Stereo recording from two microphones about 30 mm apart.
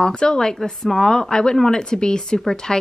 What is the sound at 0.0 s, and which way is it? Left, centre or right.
A woman's voice, left.